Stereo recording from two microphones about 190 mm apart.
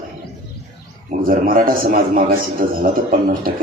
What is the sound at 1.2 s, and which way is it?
A man's voice, 50° right (ahead or behind).